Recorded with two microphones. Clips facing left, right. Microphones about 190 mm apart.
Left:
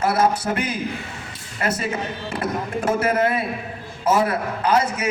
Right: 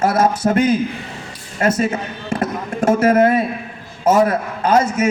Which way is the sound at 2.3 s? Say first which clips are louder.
Right 4 dB; 50° right (ahead or behind).